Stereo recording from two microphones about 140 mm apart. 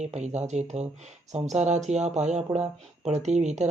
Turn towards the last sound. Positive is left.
turn(degrees=-55)  # may be behind; listen again after turning